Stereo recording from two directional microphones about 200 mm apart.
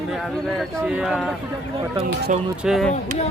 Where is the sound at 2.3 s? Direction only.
40° right (ahead or behind).